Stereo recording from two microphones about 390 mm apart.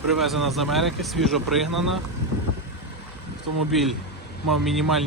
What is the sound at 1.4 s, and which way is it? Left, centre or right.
Speech, right.